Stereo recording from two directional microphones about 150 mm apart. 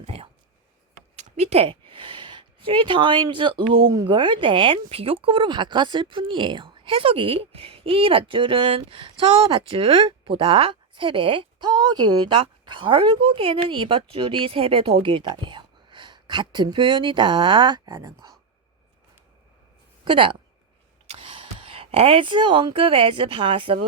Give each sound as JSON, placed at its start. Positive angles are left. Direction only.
{"t": 0.0, "sound": "a sound", "side_deg": -40}
{"t": 1.1, "sound": "speech", "side_deg": -50}
{"t": 20.1, "sound": "speech", "side_deg": -35}